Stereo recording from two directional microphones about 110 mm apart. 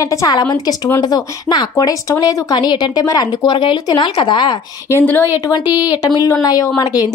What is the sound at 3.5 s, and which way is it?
Speech, 45° left (ahead or behind).